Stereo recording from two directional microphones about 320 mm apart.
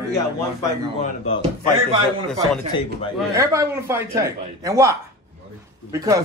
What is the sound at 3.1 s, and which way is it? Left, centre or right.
Speech, centre.